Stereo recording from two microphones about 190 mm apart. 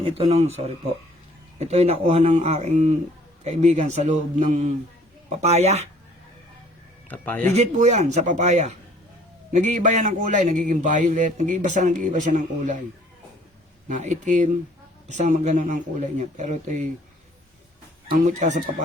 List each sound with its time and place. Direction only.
0.2 s a man's voice: 35° right (ahead or behind)
7.1 s speech: 10° left (ahead or behind)
7.5 s a man's voice: 35° right (ahead or behind)
13.8 s a man's voice: 40° right (ahead or behind)
18.1 s a man's voice: 40° right (ahead or behind)